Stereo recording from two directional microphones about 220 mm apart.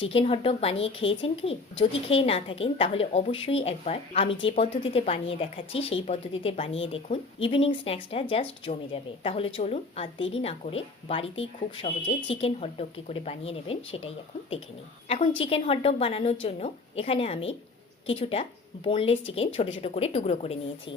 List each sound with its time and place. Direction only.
0.0 s a woman's voice: 25° left (ahead or behind)